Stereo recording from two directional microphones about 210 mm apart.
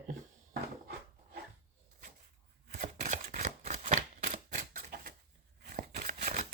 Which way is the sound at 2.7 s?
35° right (ahead or behind).